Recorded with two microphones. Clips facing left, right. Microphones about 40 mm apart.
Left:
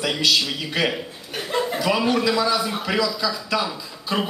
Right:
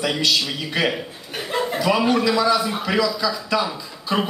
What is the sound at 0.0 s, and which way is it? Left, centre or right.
Speech, centre.